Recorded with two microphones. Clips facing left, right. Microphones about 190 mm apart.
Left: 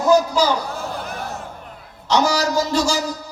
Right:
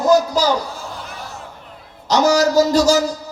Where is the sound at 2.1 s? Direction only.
40° right (ahead or behind).